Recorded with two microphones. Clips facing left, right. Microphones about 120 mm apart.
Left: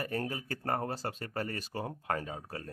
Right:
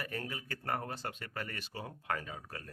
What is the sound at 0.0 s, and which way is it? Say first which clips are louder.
Speech: left 6 dB; 40° left (ahead or behind).